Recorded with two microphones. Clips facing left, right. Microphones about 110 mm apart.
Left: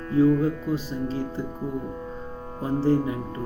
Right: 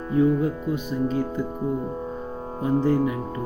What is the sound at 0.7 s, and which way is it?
Speech, 30° left (ahead or behind).